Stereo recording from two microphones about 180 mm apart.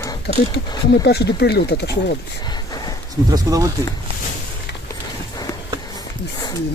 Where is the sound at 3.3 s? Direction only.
20° right (ahead or behind).